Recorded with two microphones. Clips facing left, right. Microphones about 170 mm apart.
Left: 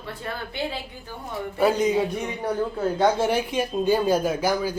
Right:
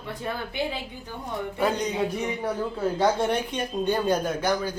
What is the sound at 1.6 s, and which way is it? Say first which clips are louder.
A man's voice: left 5 dB; 5° left (ahead or behind).